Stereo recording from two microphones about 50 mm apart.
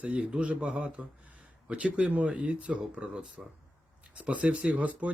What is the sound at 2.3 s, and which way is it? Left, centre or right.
Speech, right.